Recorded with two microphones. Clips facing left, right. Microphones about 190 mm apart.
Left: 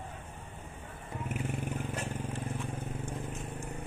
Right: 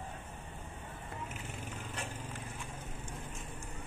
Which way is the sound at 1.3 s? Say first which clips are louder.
Left 9 dB; 55° left (ahead or behind).